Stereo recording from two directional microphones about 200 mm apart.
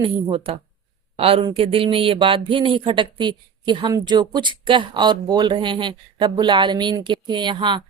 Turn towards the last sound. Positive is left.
turn(degrees=-25)  # may be behind; listen again after turning